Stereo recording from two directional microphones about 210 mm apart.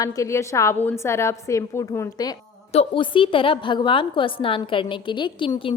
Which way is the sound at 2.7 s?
25° left (ahead or behind).